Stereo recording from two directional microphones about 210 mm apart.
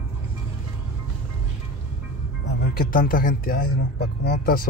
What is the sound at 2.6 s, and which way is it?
Speech, 45° left (ahead or behind).